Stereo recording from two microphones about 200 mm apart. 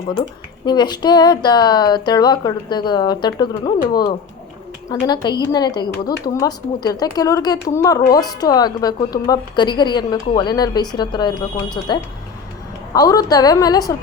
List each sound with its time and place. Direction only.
0.6 s a woman's voice: 20° left (ahead or behind)